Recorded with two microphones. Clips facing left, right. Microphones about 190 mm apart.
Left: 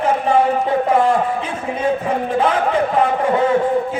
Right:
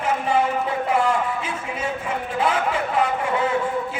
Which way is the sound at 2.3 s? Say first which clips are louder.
Left 5 dB; 40° left (ahead or behind).